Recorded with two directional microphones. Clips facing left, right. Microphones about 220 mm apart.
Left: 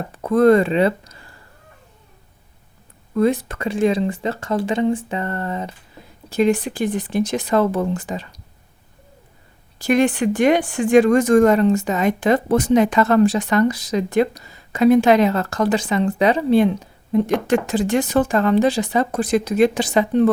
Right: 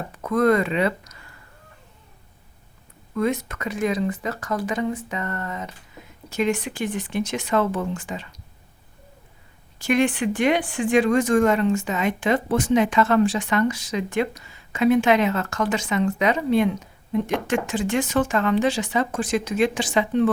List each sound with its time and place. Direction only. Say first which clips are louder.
0.2 s speech: left 6 dB; 30° left (ahead or behind)
3.2 s speech: left 6 dB; 35° left (ahead or behind)
9.7 s speech: left 4 dB; 40° left (ahead or behind)